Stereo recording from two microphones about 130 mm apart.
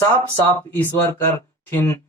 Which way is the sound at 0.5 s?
15° left (ahead or behind).